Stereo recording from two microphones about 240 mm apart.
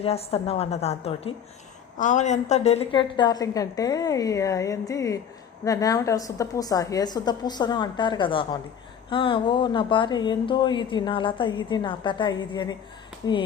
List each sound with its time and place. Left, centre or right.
0.0 s a woman's voice: left